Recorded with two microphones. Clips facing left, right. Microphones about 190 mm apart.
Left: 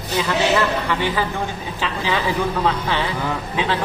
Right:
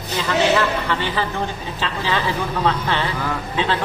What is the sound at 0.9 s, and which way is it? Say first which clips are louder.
Speech: left 1 dB; 10° left (ahead or behind).